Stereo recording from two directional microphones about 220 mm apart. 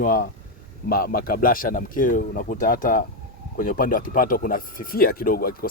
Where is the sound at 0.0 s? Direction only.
40° left (ahead or behind).